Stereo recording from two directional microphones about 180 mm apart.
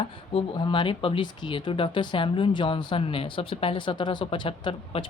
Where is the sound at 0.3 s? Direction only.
25° left (ahead or behind).